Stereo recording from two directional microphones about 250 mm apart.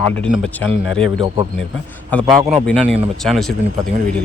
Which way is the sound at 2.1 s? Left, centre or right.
Centre.